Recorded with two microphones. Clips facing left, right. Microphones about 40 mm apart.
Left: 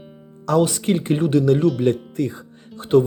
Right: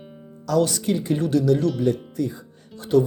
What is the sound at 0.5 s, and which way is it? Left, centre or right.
Speech, left.